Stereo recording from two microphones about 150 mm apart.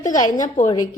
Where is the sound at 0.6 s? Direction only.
55° left (ahead or behind).